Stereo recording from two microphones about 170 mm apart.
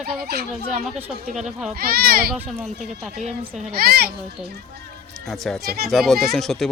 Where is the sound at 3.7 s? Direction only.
65° right (ahead or behind).